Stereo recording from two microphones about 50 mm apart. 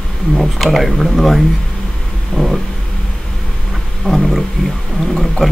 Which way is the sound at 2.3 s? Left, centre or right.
Left.